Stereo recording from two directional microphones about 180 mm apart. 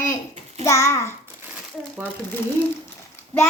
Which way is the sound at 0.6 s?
15° left (ahead or behind).